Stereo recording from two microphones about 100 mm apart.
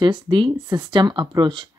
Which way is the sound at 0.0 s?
55° right (ahead or behind).